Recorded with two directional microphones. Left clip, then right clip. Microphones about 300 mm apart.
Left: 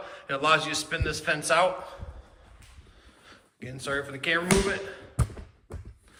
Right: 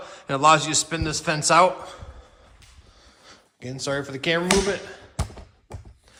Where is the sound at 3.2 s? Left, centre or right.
Centre.